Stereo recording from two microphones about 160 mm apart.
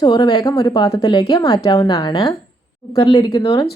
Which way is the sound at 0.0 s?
25° left (ahead or behind).